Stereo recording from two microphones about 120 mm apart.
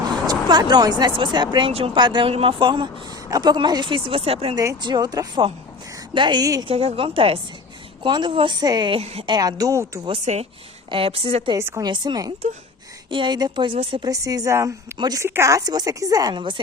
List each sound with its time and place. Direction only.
0.1 s speech: 35° right (ahead or behind); by 4.5 s 55° right (ahead or behind)
4.5 s speech: 30° right (ahead or behind)
6.7 s speech: 50° right (ahead or behind); by 8.9 s 35° right (ahead or behind)
8.9 s speech: 50° right (ahead or behind)
9.3 s a woman's voice: 30° right (ahead or behind)
10.3 s speech: 75° right (ahead or behind)
10.9 s speech: 50° right (ahead or behind)
11.5 s a woman's voice: 25° right (ahead or behind)
15.2 s speech: 25° right (ahead or behind)